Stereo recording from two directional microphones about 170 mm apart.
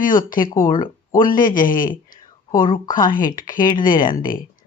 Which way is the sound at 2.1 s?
55° left (ahead or behind).